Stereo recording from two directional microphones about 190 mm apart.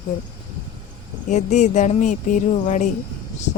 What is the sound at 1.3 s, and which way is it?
Speech, 40° left (ahead or behind).